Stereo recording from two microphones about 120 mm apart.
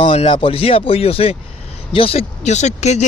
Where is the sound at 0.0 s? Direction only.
55° left (ahead or behind).